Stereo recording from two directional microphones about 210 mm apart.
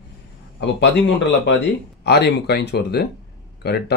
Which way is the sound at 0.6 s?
55° left (ahead or behind).